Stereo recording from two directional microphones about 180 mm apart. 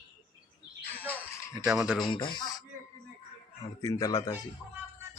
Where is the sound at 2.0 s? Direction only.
25° left (ahead or behind).